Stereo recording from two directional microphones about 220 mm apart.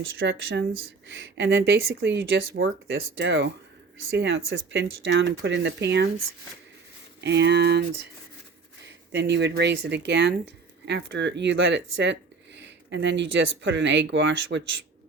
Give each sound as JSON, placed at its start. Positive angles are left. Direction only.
{"t": 0.0, "sound": "speech", "side_deg": -60}
{"t": 7.2, "sound": "speech", "side_deg": -50}
{"t": 9.1, "sound": "speech", "side_deg": -50}